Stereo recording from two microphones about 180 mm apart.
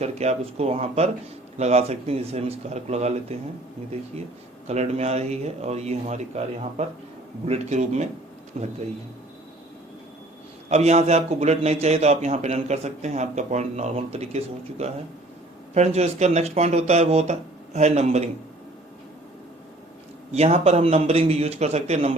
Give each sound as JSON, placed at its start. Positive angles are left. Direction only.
{"t": 0.0, "sound": "a man's voice", "side_deg": -35}
{"t": 4.6, "sound": "a man's voice", "side_deg": -40}
{"t": 10.7, "sound": "a man's voice", "side_deg": -35}
{"t": 20.3, "sound": "a man's voice", "side_deg": -35}